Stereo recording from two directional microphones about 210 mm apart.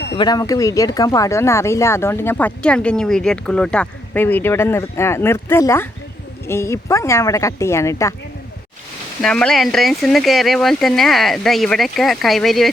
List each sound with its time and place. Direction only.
0.2 s speech: 20° left (ahead or behind)
9.2 s speech: 5° left (ahead or behind)